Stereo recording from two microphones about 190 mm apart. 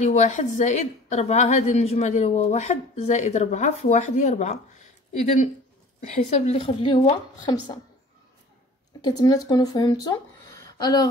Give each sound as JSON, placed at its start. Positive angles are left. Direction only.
{"t": 0.0, "sound": "a woman's voice", "side_deg": 35}
{"t": 9.0, "sound": "speech", "side_deg": 20}